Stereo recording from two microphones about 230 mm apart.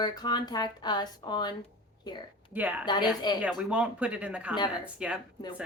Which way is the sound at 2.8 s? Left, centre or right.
Centre.